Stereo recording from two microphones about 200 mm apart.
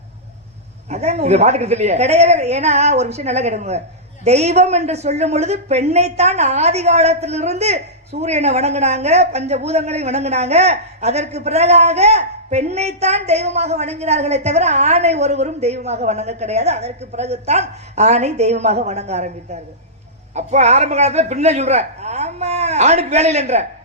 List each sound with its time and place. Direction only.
0.9 s a woman's voice: 35° right (ahead or behind)
20.3 s a woman's voice: 35° right (ahead or behind)